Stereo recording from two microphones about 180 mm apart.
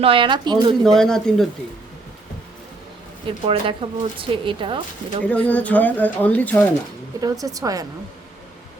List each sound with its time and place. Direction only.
0.0 s speech: 30° right (ahead or behind)
0.9 s speech: 5° left (ahead or behind)
3.2 s speech: 30° right (ahead or behind)
5.2 s speech: 5° left (ahead or behind)
7.2 s speech: 20° right (ahead or behind)